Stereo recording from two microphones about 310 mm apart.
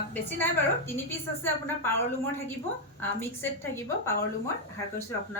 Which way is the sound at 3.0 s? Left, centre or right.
Centre.